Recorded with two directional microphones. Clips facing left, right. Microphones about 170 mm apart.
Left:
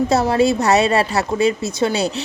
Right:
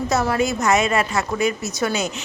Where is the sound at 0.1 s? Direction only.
30° left (ahead or behind).